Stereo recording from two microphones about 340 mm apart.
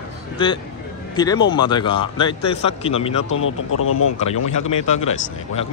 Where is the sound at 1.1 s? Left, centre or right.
Centre.